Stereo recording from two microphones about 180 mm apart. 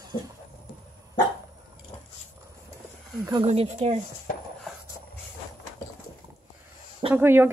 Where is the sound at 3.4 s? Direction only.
35° right (ahead or behind).